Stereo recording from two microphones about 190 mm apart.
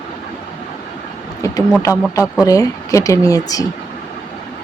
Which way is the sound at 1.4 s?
15° left (ahead or behind).